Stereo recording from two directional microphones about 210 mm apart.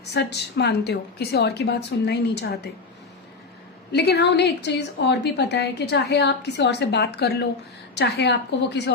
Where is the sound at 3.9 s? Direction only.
50° left (ahead or behind).